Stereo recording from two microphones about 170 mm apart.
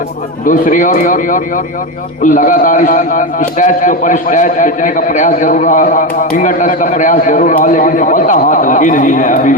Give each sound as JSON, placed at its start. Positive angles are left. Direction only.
{"t": 0.4, "sound": "a man's voice", "side_deg": 50}